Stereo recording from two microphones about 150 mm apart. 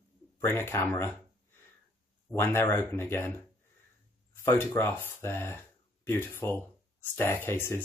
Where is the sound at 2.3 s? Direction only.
15° left (ahead or behind).